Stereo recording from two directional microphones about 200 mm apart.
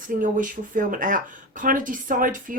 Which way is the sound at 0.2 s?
40° right (ahead or behind).